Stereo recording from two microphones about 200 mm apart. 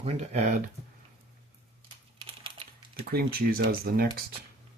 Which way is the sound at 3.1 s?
50° right (ahead or behind).